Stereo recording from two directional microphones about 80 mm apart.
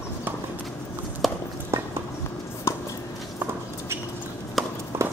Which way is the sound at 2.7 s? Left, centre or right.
Left.